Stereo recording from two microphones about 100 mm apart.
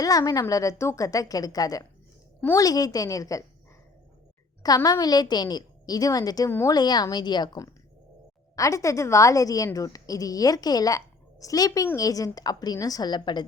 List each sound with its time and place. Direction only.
0.0 s a woman's voice: 35° left (ahead or behind)
4.6 s a woman's voice: 40° left (ahead or behind)
8.5 s a woman's voice: 30° left (ahead or behind); by 13.4 s 50° left (ahead or behind)